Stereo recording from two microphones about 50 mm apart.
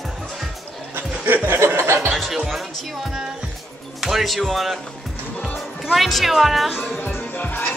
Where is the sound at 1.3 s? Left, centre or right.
Right.